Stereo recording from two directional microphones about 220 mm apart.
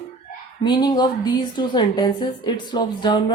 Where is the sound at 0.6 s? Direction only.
20° left (ahead or behind).